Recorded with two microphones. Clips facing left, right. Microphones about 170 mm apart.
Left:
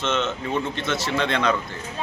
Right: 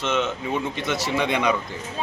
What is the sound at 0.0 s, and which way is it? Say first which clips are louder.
A man's voice: even; 10° right (ahead or behind).